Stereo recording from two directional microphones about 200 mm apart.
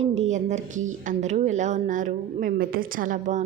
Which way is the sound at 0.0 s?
35° right (ahead or behind).